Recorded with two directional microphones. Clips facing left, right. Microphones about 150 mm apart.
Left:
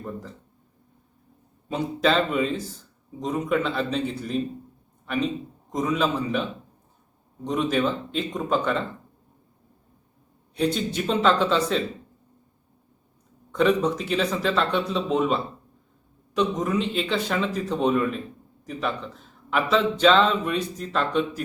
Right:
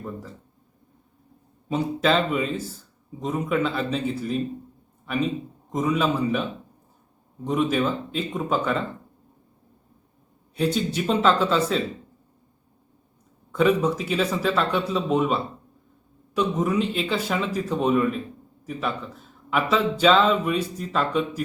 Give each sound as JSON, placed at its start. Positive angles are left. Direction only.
{"t": 1.7, "sound": "speech", "side_deg": 0}
{"t": 5.7, "sound": "speech", "side_deg": -5}
{"t": 7.4, "sound": "speech", "side_deg": -5}
{"t": 10.5, "sound": "speech", "side_deg": -5}
{"t": 13.5, "sound": "speech", "side_deg": -5}